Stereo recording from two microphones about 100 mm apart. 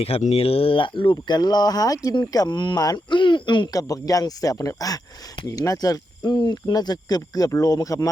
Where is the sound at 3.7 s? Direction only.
35° left (ahead or behind).